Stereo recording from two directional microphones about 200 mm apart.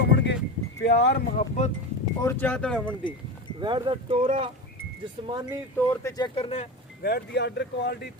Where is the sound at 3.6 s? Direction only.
25° right (ahead or behind).